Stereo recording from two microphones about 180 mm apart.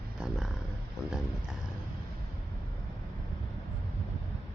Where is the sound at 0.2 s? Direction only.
5° right (ahead or behind).